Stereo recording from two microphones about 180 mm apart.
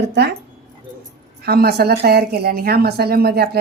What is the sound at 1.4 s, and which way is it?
A woman's voice, 60° right (ahead or behind).